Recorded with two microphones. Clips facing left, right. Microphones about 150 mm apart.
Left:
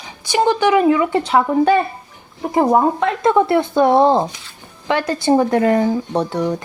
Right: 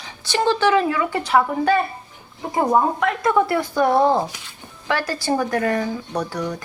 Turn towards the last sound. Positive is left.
turn(degrees=25)  # may be behind; listen again after turning